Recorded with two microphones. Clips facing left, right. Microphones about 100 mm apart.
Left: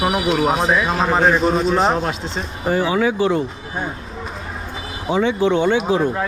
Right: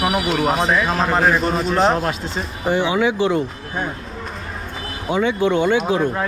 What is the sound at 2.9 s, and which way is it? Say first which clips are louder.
Speech: even; 20° right (ahead or behind).